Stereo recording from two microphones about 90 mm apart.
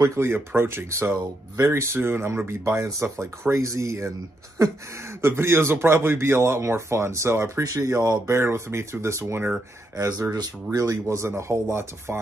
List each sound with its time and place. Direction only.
0.0 s a man's voice: 30° right (ahead or behind)
9.9 s speech: 35° right (ahead or behind)